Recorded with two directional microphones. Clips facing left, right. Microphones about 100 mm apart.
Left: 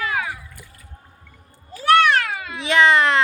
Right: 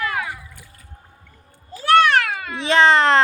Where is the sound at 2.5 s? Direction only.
30° right (ahead or behind).